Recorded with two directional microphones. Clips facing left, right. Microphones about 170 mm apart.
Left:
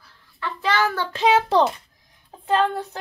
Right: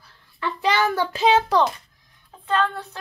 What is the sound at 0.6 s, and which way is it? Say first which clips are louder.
Child singing: right 1 dB; 15° right (ahead or behind).